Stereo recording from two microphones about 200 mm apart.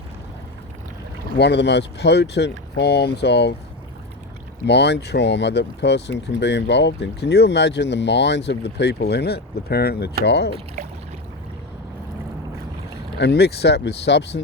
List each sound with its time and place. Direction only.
1.4 s speech: 60° left (ahead or behind)
4.6 s speech: 60° left (ahead or behind)
13.1 s speech: 55° left (ahead or behind)